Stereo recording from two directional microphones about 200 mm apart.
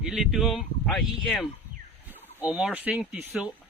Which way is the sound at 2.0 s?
10° right (ahead or behind).